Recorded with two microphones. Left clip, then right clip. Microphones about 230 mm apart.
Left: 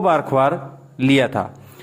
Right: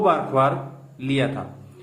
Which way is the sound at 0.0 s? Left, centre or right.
Left.